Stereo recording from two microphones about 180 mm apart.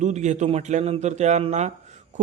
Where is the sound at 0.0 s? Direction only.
40° right (ahead or behind).